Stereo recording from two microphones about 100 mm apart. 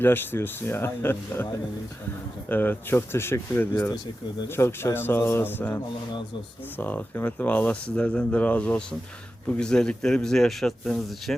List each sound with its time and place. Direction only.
0.0 s speech: 20° left (ahead or behind)
2.5 s a man's voice: 20° left (ahead or behind); by 11.3 s centre (ahead or behind)